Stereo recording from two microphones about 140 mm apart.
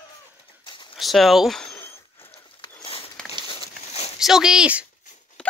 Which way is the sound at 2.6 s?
40° left (ahead or behind).